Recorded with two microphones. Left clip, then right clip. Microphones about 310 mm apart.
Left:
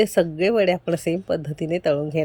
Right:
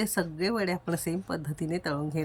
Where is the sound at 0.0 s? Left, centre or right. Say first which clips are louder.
Left 11 dB; centre.